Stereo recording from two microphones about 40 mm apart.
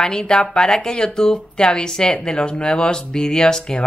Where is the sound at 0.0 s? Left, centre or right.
Centre.